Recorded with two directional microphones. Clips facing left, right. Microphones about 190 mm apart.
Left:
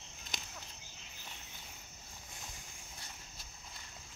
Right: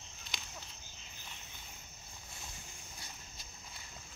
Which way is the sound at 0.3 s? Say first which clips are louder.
Left 2 dB; 45° left (ahead or behind).